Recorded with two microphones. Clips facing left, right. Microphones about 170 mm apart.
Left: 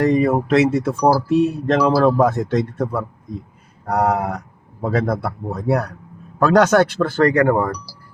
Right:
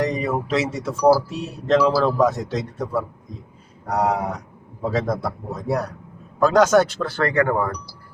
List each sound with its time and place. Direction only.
0.0 s speech: 55° left (ahead or behind)
7.3 s speech: 40° left (ahead or behind)